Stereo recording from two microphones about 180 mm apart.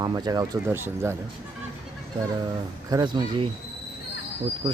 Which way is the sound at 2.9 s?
20° right (ahead or behind).